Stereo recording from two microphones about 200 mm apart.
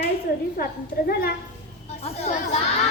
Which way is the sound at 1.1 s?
50° left (ahead or behind).